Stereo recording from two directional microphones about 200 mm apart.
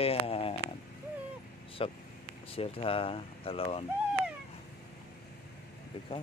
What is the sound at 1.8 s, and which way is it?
Speech, 30° left (ahead or behind).